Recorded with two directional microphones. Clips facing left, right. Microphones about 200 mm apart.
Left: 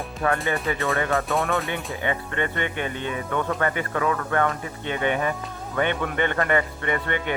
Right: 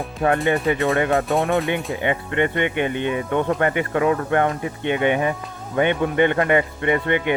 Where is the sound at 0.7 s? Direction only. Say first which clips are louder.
Right 6 dB; 20° right (ahead or behind).